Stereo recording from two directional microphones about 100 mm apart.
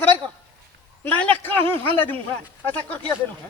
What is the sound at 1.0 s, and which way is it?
A woman's voice, 20° left (ahead or behind).